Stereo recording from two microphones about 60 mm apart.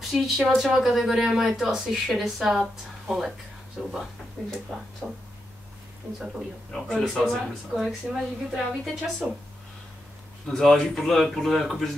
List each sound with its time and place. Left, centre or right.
0.1 s speech: centre
4.4 s speech: centre
5.0 s speech: centre
6.7 s speech: centre
10.4 s speech: centre